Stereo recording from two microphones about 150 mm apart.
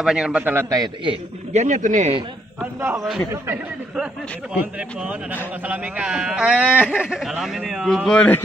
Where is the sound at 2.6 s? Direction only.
15° right (ahead or behind).